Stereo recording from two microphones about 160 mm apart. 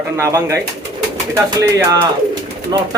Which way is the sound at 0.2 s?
15° right (ahead or behind).